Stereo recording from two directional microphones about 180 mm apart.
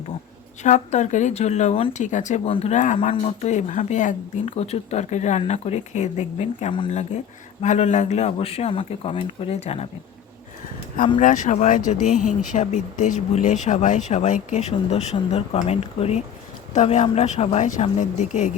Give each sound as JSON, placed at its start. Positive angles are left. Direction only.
{"t": 0.6, "sound": "speech", "side_deg": 40}
{"t": 2.7, "sound": "speech", "side_deg": 45}
{"t": 7.6, "sound": "speech", "side_deg": 40}
{"t": 10.9, "sound": "speech", "side_deg": 45}